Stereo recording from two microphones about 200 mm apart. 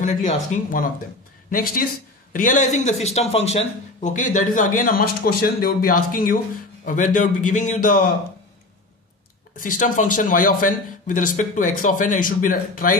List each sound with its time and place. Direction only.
0.0 s a man's voice: 40° left (ahead or behind)
9.6 s a man's voice: 40° left (ahead or behind)